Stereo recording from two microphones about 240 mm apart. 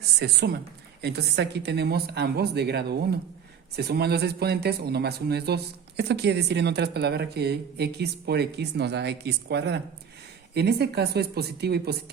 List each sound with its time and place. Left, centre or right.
0.2 s a woman's voice: right